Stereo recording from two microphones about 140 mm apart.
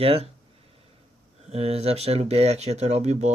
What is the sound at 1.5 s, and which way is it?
Speech, 45° right (ahead or behind).